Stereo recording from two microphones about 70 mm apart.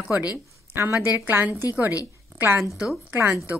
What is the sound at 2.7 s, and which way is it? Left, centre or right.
Speech, centre.